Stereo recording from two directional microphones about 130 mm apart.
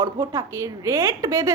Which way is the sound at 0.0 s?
25° right (ahead or behind).